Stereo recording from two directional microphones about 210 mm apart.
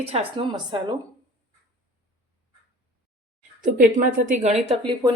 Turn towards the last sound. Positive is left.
turn(degrees=-30)  # may be behind; listen again after turning